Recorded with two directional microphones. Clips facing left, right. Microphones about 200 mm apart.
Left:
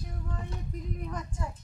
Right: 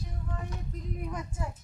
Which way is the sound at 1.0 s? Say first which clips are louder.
Right 1 dB; 10° right (ahead or behind).